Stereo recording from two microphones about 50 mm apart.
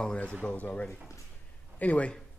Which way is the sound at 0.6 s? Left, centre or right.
Left.